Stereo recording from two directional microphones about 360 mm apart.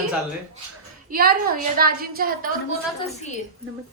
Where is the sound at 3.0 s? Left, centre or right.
Centre.